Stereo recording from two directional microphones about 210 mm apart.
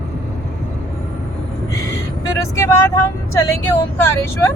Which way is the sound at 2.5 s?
15° left (ahead or behind).